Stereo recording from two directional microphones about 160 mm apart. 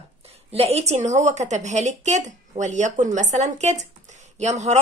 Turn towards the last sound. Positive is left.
turn(degrees=-45)  # may be behind; listen again after turning